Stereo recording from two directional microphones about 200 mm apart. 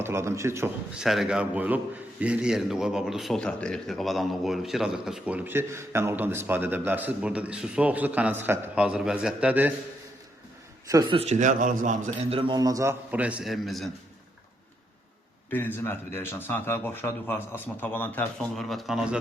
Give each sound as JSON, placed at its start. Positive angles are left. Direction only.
{"t": 0.0, "sound": "a man's voice", "side_deg": -15}
{"t": 1.0, "sound": "a man's voice", "side_deg": 0}
{"t": 10.8, "sound": "a man's voice", "side_deg": -15}
{"t": 11.2, "sound": "a man's voice", "side_deg": -35}
{"t": 12.4, "sound": "a man's voice", "side_deg": -20}
{"t": 15.4, "sound": "speech", "side_deg": 10}